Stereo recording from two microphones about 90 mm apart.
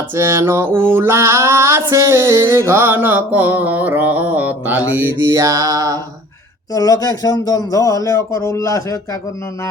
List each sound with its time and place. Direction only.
0.2 s music: 30° right (ahead or behind)
6.7 s speech: 45° left (ahead or behind)